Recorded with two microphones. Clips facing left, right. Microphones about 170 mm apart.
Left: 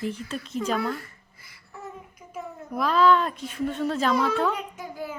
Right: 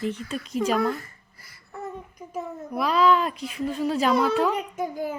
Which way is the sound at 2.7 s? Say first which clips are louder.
Even; 5° right (ahead or behind).